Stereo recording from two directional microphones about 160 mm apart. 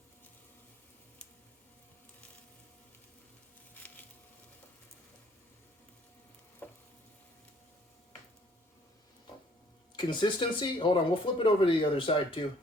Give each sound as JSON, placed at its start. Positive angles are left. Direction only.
{"t": 3.8, "sound": "a sound", "side_deg": 10}
{"t": 6.6, "sound": "frying", "side_deg": 10}
{"t": 9.9, "sound": "speech", "side_deg": 30}